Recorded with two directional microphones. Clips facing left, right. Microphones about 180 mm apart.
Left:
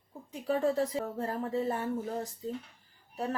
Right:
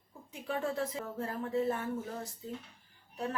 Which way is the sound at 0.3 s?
35° left (ahead or behind).